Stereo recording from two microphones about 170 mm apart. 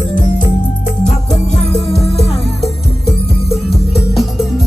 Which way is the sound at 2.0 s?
35° left (ahead or behind).